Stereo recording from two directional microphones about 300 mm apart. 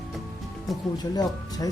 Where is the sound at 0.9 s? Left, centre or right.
Centre.